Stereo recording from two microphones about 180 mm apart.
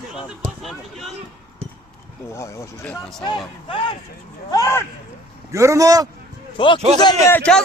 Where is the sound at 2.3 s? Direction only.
15° left (ahead or behind).